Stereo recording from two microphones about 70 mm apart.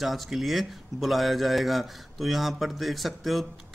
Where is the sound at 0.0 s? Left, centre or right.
Centre.